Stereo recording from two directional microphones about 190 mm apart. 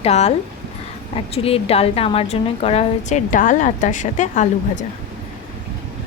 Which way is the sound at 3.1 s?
40° left (ahead or behind).